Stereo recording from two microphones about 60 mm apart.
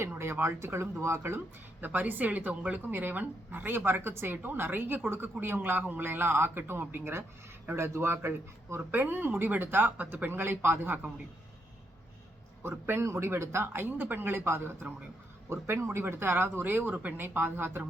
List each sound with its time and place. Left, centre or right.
0.0 s speech: right
1.8 s a woman's voice: right
12.6 s a woman's voice: right